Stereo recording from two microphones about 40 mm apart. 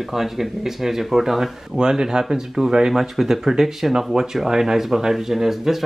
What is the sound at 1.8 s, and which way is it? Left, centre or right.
Speech, centre.